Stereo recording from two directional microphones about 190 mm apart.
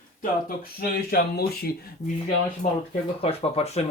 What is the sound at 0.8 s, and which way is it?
Speech, 55° left (ahead or behind).